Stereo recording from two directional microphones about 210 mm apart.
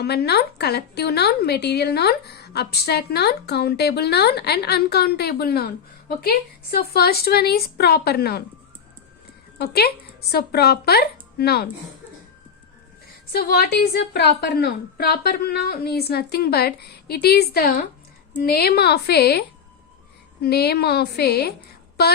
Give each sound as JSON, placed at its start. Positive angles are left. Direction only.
{"t": 0.0, "sound": "a woman's voice", "side_deg": 50}
{"t": 9.6, "sound": "speech", "side_deg": 50}
{"t": 13.3, "sound": "a woman's voice", "side_deg": 45}